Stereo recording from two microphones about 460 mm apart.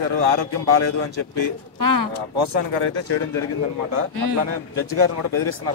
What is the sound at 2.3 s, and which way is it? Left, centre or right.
Speech, right.